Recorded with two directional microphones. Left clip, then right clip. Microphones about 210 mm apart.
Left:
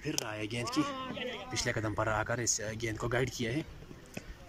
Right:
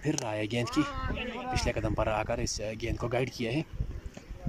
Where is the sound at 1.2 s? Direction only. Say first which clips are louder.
Right 4 dB; 40° right (ahead or behind).